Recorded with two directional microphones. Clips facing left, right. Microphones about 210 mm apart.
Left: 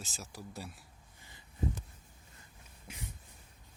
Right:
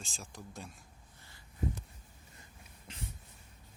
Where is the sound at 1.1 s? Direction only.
15° left (ahead or behind).